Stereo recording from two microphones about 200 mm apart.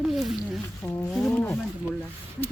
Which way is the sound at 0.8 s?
10° left (ahead or behind).